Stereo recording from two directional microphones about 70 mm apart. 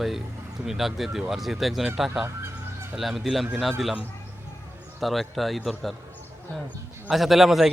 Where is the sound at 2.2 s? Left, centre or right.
Right.